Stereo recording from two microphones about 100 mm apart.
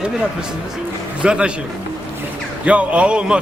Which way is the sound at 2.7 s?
15° right (ahead or behind).